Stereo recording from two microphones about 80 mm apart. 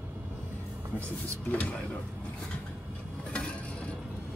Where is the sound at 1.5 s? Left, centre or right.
Centre.